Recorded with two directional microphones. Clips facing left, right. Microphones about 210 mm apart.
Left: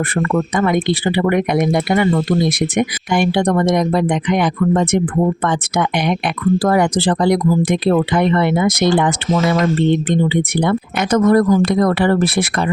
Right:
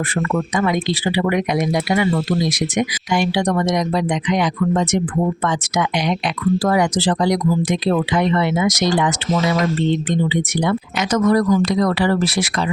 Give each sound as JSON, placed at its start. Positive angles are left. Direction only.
{"t": 0.1, "sound": "speech", "side_deg": 50}